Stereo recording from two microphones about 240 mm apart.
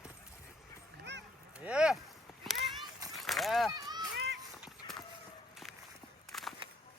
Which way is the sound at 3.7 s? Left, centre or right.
Centre.